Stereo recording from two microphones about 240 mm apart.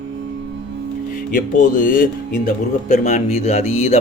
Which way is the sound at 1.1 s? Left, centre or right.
Left.